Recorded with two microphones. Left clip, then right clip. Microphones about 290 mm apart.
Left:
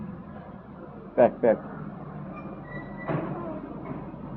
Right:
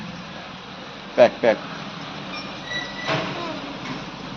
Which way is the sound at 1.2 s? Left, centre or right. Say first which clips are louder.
Right 5 dB; centre.